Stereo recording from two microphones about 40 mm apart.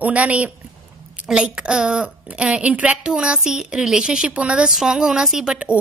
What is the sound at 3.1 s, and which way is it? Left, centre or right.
A child's voice, right.